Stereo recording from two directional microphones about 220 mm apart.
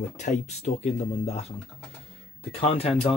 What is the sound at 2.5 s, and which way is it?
Speech, 25° left (ahead or behind).